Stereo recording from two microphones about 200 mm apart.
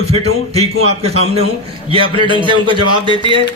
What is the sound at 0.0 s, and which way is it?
A man's voice, 30° right (ahead or behind).